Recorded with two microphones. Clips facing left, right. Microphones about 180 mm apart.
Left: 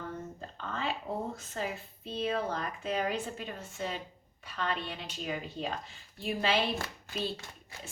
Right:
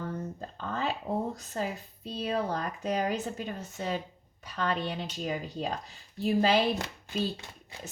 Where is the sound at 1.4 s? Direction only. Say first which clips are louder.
Right 3 dB; 40° right (ahead or behind).